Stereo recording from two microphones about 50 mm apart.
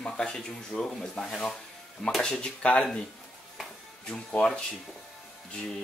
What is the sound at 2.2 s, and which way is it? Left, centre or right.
Speech, centre.